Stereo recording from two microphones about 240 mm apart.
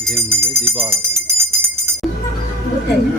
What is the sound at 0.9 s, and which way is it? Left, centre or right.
Music, centre.